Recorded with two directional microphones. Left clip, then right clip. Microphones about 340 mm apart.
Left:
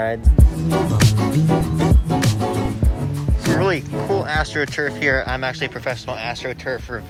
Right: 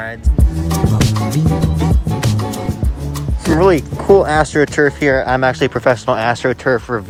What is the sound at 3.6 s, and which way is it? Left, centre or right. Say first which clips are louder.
Speech: right 8 dB; centre.